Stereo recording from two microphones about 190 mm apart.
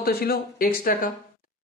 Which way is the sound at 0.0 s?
55° left (ahead or behind).